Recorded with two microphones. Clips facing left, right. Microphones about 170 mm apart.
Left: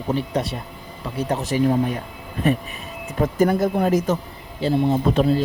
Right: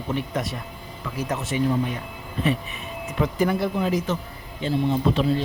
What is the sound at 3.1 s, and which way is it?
Speech, 45° left (ahead or behind).